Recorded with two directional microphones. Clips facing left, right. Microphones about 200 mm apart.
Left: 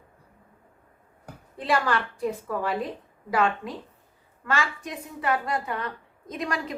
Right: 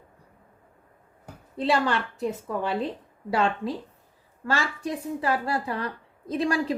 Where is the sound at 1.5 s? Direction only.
25° right (ahead or behind).